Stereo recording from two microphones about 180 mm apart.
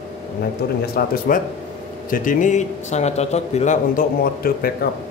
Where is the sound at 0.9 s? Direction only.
50° left (ahead or behind).